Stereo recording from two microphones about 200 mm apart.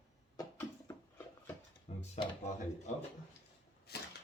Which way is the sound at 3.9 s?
50° left (ahead or behind).